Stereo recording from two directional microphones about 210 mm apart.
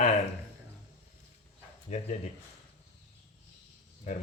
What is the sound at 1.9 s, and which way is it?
Speech, 35° left (ahead or behind).